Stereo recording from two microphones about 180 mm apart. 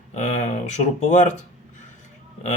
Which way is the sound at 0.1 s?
40° left (ahead or behind).